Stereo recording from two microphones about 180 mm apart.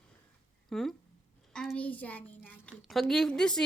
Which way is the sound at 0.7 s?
Centre (ahead or behind).